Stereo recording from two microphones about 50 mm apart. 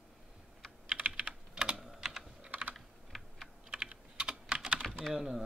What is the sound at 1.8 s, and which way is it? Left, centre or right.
Typing, centre.